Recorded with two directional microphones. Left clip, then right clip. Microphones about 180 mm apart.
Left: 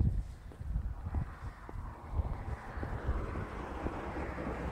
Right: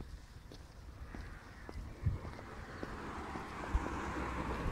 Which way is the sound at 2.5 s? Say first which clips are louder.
Left 2 dB; 45° right (ahead or behind).